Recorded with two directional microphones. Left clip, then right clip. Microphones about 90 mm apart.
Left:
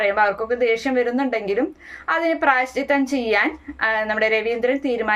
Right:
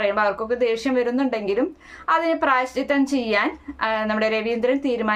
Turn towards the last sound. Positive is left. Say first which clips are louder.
# left 1 dB
turn(degrees=-35)  # may be behind; listen again after turning